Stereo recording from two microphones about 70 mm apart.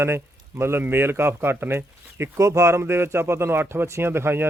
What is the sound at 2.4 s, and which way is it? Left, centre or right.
Speech, right.